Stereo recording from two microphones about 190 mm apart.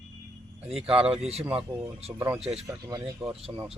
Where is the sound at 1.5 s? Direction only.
30° right (ahead or behind).